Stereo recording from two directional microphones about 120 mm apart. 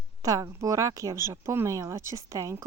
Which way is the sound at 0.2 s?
30° right (ahead or behind).